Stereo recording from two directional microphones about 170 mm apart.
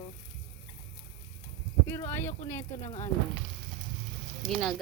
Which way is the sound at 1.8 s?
15° left (ahead or behind).